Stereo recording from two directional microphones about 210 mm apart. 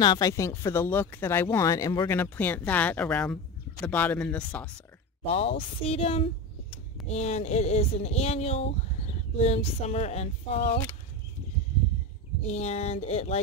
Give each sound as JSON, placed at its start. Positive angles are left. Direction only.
{"t": 0.0, "sound": "speech", "side_deg": 20}
{"t": 5.2, "sound": "speech", "side_deg": 30}
{"t": 12.4, "sound": "speech", "side_deg": 30}